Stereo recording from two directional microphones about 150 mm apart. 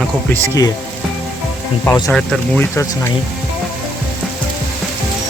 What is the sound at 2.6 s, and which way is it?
Speech, 15° left (ahead or behind).